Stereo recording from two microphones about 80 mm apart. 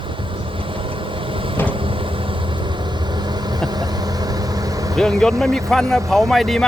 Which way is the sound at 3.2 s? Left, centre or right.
Right.